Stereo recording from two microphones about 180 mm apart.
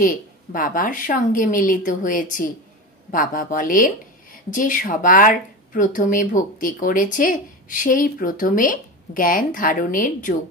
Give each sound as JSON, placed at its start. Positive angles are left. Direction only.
{"t": 0.0, "sound": "speech", "side_deg": 50}